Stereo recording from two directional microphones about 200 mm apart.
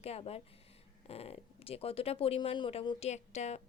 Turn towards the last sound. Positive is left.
turn(degrees=35)  # may be behind; listen again after turning